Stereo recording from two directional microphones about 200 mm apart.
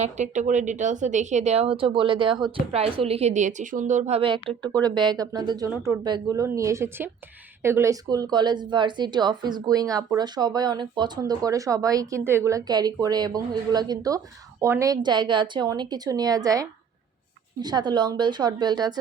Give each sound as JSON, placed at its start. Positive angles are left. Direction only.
{"t": 0.0, "sound": "a woman's voice", "side_deg": -35}